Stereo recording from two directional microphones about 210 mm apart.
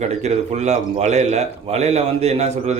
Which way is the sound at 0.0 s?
35° right (ahead or behind).